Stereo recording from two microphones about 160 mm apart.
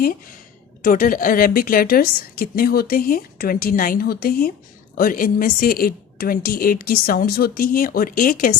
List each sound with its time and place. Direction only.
0.8 s a woman's voice: 55° left (ahead or behind)